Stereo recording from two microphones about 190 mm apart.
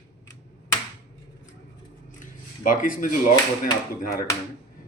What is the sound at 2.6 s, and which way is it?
Speech, 45° left (ahead or behind).